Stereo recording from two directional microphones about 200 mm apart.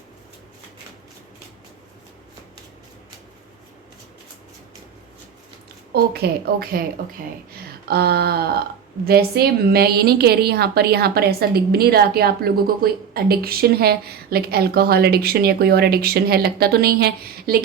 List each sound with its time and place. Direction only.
5.9 s a woman's voice: 50° right (ahead or behind)
7.9 s a woman's voice: 50° right (ahead or behind)